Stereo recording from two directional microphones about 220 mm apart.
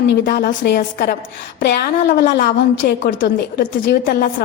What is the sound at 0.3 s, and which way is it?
A woman's voice, 45° left (ahead or behind).